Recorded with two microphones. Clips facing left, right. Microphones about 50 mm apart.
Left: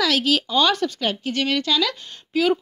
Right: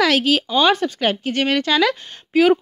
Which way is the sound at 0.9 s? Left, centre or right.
Right.